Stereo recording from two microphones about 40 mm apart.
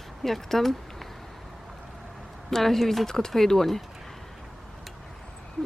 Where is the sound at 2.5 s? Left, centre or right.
Centre.